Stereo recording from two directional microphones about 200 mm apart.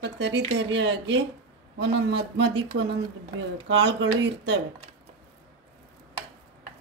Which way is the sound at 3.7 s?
65° right (ahead or behind).